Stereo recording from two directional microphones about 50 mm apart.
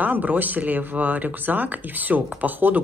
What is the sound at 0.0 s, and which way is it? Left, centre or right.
Speech, right.